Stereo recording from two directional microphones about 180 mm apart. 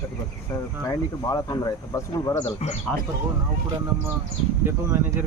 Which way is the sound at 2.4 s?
35° left (ahead or behind).